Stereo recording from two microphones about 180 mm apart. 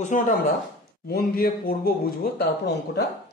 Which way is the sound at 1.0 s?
55° left (ahead or behind).